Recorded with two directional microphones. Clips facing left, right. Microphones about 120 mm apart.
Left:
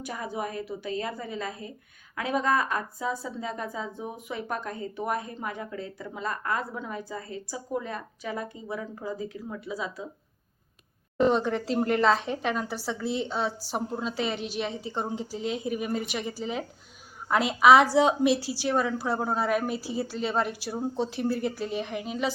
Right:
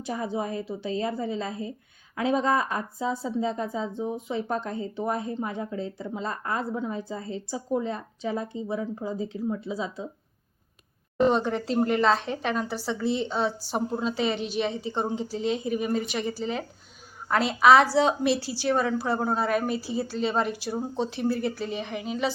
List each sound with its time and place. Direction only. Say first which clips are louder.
0.0 s speech: right 3 dB; 25° right (ahead or behind)
11.2 s a woman's voice: right 1 dB; centre (ahead or behind)